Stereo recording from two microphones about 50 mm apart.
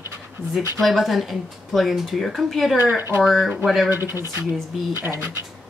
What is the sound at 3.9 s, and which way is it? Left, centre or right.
Speech, right.